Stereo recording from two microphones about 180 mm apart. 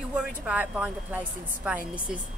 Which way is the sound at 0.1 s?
5° right (ahead or behind).